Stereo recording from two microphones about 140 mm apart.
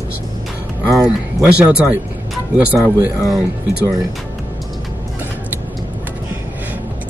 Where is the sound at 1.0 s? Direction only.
10° right (ahead or behind).